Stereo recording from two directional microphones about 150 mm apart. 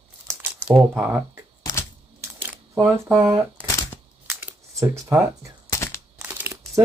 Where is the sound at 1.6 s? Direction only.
20° left (ahead or behind).